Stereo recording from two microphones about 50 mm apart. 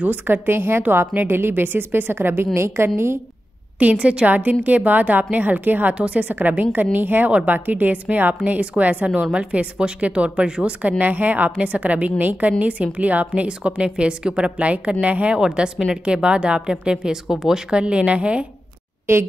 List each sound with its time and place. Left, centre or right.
0.0 s a woman's voice: right
0.8 s a woman's voice: right
2.5 s a woman's voice: right
3.8 s a woman's voice: right
10.8 s a woman's voice: right